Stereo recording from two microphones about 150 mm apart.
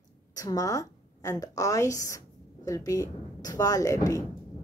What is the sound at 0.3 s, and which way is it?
A woman's voice, 25° left (ahead or behind).